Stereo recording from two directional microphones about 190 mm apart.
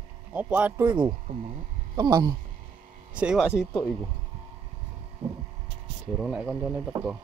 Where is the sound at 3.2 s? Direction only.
5° right (ahead or behind).